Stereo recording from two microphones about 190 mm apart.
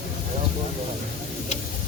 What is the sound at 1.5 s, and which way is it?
Tick-tock, 35° left (ahead or behind).